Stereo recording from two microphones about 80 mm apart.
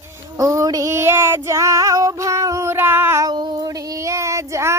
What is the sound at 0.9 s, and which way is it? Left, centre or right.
Female singing, right.